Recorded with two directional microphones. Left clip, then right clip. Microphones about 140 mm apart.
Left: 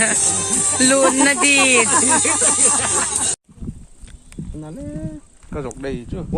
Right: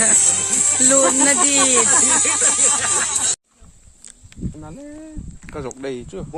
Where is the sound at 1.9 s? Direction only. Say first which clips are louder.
Even; 40° left (ahead or behind).